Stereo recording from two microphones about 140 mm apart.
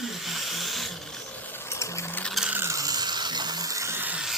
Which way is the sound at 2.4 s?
15° right (ahead or behind).